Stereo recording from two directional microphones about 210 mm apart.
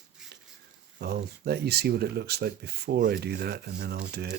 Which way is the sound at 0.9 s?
50° right (ahead or behind).